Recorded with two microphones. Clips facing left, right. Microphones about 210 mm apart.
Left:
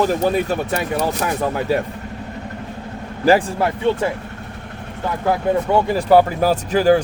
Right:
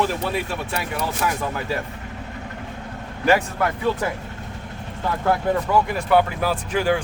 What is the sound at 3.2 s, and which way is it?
Speech, 30° left (ahead or behind).